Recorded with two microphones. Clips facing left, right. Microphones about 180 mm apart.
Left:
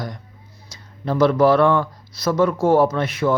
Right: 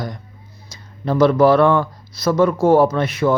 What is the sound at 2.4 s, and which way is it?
Speech, 35° right (ahead or behind).